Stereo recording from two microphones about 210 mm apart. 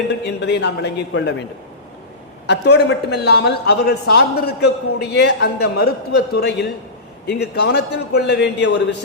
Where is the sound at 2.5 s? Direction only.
55° left (ahead or behind).